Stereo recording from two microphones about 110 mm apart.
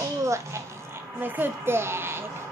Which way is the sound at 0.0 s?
25° right (ahead or behind).